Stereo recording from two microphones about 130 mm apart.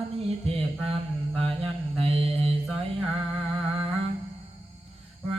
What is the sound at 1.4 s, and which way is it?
Mantra, 45° right (ahead or behind).